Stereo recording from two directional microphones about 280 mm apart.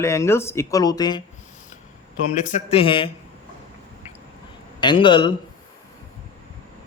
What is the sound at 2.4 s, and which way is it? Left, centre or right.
Speech, left.